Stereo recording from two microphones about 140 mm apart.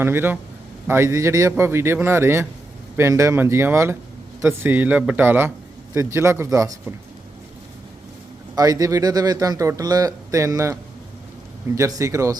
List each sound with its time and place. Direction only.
0.0 s a man's voice: 15° right (ahead or behind)
8.5 s speech: 25° right (ahead or behind)